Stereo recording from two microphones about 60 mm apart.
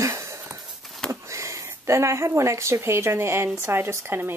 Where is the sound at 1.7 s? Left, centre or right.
Right.